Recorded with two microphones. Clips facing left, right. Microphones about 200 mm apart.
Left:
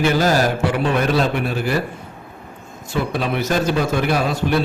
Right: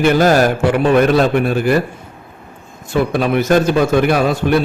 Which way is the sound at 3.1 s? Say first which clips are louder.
Right 7 dB; 55° right (ahead or behind).